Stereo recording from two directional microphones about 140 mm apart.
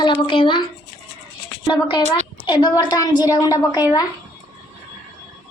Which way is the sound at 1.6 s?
35° left (ahead or behind).